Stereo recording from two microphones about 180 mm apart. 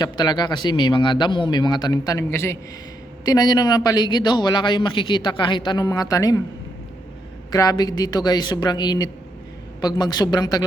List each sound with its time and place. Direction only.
0.0 s a man's voice: 25° left (ahead or behind)
7.5 s a man's voice: 20° left (ahead or behind)